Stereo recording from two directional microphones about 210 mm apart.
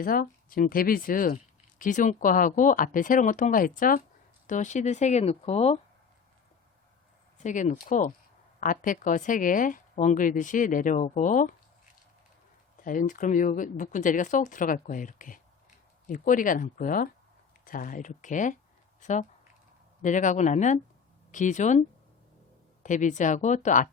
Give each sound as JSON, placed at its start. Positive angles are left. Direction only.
{"t": 0.0, "sound": "speech", "side_deg": 45}
{"t": 7.3, "sound": "speech", "side_deg": 35}
{"t": 12.7, "sound": "speech", "side_deg": 40}
{"t": 20.0, "sound": "speech", "side_deg": 35}